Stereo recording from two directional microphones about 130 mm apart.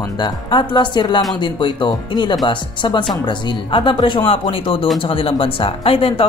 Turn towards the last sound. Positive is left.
turn(degrees=45)  # may be behind; listen again after turning